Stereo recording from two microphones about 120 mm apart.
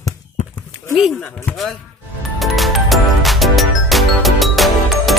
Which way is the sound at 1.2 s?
20° left (ahead or behind).